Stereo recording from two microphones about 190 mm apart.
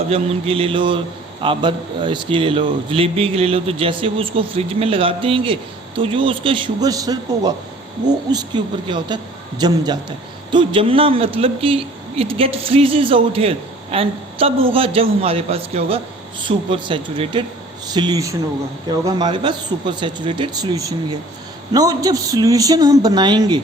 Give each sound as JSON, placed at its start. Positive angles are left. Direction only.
{"t": 0.1, "sound": "a man's voice", "side_deg": -30}